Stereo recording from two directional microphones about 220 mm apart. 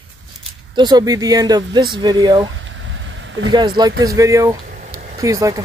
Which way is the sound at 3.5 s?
20° right (ahead or behind).